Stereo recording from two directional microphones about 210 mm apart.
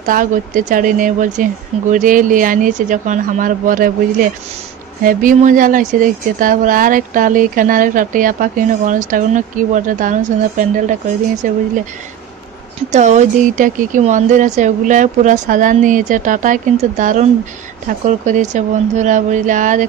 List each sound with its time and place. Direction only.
0.0 s speech: 40° right (ahead or behind)
12.9 s speech: 35° right (ahead or behind)